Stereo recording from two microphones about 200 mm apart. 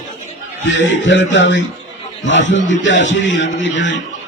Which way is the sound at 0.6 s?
65° left (ahead or behind).